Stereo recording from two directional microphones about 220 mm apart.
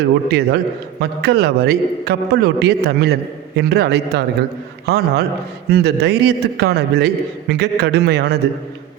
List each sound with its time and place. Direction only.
0.3 s a man's voice: 45° right (ahead or behind)